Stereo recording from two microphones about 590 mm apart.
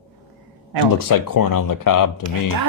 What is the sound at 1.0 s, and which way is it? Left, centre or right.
Speech, left.